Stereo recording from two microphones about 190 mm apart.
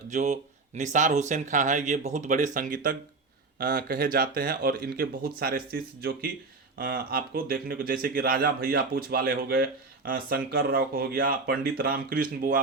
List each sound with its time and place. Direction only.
0.1 s speech: 40° right (ahead or behind)